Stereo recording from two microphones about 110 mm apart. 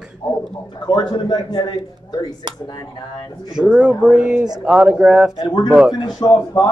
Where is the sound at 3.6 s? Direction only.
10° right (ahead or behind).